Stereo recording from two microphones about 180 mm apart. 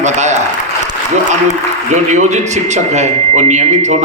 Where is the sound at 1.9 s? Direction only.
40° right (ahead or behind).